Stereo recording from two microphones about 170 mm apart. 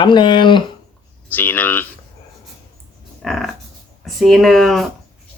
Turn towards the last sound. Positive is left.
turn(degrees=0)  # may be behind; listen again after turning